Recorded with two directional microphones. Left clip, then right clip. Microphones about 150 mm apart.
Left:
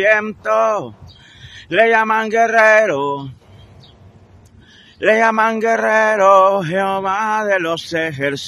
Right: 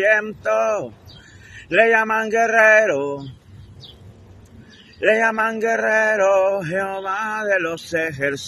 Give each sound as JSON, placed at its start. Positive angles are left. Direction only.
{"t": 0.0, "sound": "a man's voice", "side_deg": 40}
{"t": 5.0, "sound": "mantra", "side_deg": 45}